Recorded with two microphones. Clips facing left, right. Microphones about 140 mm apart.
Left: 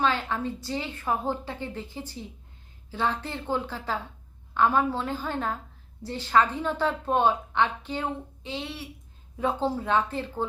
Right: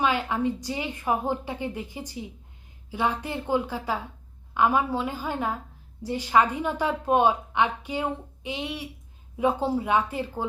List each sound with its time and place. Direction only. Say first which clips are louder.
0.0 s a woman's voice: right 2 dB; 15° right (ahead or behind)